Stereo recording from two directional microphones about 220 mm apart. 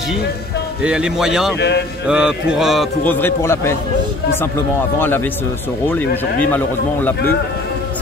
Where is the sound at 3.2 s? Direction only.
10° left (ahead or behind).